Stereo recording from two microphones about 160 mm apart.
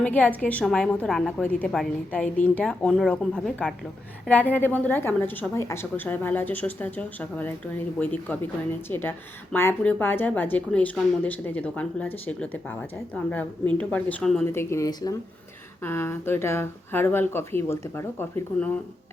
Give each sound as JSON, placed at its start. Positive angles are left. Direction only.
{"t": 0.0, "sound": "speech", "side_deg": 10}
{"t": 13.7, "sound": "speech", "side_deg": 10}
{"t": 14.5, "sound": "speech", "side_deg": 15}